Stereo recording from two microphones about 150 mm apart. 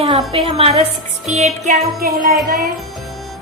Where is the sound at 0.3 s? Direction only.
40° right (ahead or behind).